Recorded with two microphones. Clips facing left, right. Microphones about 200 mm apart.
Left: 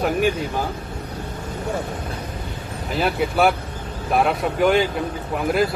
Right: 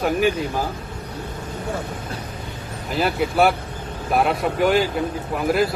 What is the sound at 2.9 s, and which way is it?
Speech, centre (ahead or behind).